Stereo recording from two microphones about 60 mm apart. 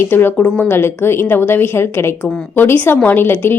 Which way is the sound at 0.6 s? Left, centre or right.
Left.